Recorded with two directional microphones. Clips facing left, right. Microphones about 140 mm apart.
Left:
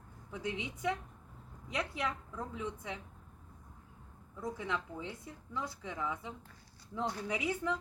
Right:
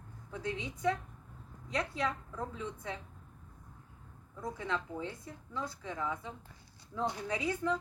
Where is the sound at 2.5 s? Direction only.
15° left (ahead or behind).